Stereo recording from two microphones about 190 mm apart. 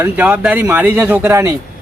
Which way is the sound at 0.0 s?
10° right (ahead or behind).